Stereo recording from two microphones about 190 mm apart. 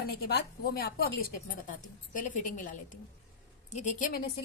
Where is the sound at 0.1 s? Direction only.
55° left (ahead or behind).